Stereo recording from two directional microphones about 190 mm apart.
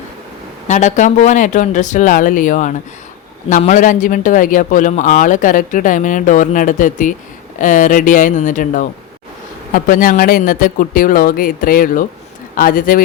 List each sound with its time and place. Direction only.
0.7 s speech: 40° left (ahead or behind)